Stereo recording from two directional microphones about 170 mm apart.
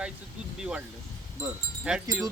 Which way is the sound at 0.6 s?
5° right (ahead or behind).